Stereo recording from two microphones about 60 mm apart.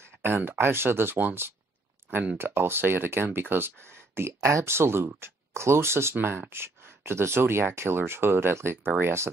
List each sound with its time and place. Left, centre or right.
0.4 s speech: right
2.0 s a sound: right
2.3 s speech: right